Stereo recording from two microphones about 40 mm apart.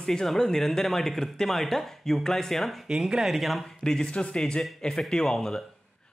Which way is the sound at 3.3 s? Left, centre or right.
Centre.